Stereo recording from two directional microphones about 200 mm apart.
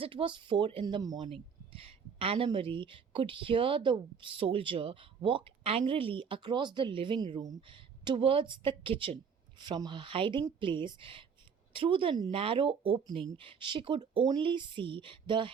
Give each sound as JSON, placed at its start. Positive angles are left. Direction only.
{"t": 0.0, "sound": "speech", "side_deg": -25}